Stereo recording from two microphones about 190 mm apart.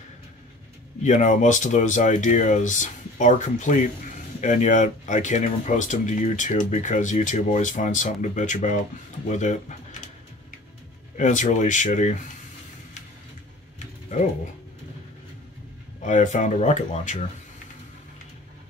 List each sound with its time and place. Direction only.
1.0 s speech: 40° left (ahead or behind)
11.1 s speech: 40° left (ahead or behind)
16.0 s speech: 40° left (ahead or behind)